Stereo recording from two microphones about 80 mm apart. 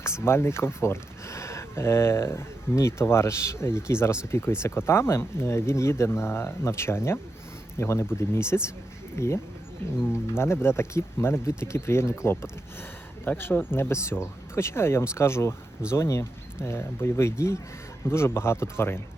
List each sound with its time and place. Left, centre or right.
0.0 s speech: left